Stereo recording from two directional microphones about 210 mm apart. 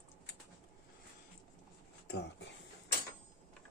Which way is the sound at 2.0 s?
55° left (ahead or behind).